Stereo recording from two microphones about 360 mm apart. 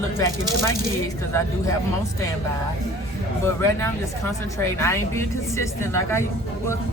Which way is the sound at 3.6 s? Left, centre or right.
Centre.